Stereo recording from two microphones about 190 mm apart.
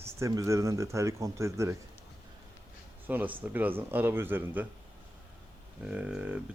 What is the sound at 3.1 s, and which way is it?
Speech, 10° right (ahead or behind).